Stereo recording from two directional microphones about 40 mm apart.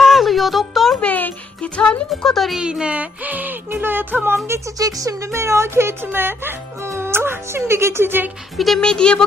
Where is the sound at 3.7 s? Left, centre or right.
Right.